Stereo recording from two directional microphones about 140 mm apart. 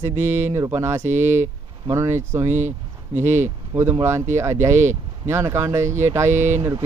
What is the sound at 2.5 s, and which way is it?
Speech, 60° right (ahead or behind).